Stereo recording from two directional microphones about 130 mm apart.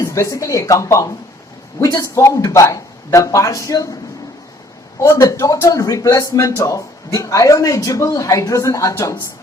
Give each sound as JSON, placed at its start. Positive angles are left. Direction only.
{"t": 0.0, "sound": "a man's voice", "side_deg": 25}
{"t": 5.0, "sound": "a man's voice", "side_deg": 25}